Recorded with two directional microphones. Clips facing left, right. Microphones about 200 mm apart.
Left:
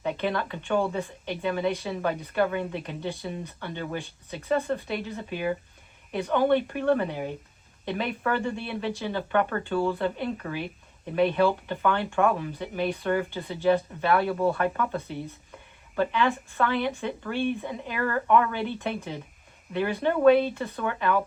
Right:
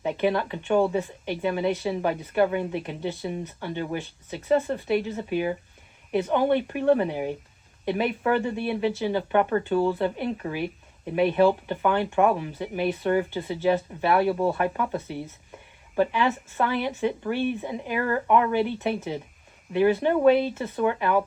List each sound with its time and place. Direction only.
0.0 s speech: 15° right (ahead or behind)